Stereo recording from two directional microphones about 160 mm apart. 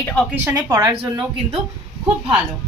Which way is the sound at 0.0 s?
5° left (ahead or behind).